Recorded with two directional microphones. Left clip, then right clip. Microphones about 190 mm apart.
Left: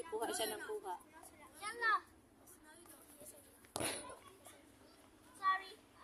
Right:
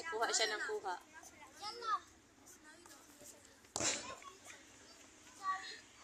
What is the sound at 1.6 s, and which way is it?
Speech, 15° right (ahead or behind).